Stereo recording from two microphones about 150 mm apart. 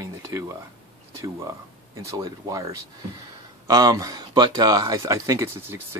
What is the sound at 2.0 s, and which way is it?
Speech, 25° right (ahead or behind).